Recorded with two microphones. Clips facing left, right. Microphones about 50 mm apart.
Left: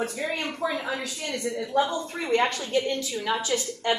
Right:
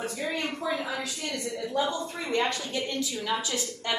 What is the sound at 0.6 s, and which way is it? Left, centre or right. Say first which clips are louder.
Speech: left 3 dB; left.